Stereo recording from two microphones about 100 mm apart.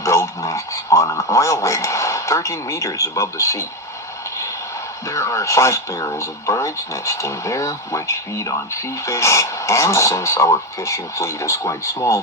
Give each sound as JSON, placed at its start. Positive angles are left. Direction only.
{"t": 0.0, "sound": "radio", "side_deg": 30}
{"t": 5.0, "sound": "speech", "side_deg": 30}